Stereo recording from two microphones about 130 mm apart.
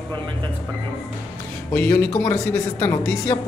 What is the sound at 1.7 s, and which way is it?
Speech, 15° left (ahead or behind).